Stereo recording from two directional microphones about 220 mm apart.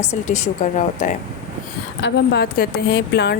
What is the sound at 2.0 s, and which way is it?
A woman's voice, 50° left (ahead or behind).